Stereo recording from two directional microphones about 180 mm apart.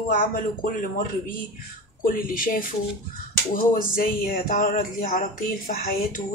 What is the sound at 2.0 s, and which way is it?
Speech, 50° left (ahead or behind).